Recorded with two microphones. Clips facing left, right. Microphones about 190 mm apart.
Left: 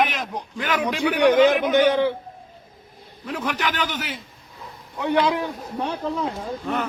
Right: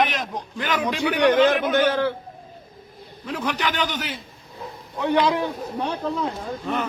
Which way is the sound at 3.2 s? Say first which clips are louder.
Even; 5° left (ahead or behind).